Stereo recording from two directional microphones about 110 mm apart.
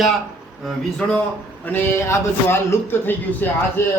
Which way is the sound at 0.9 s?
10° left (ahead or behind).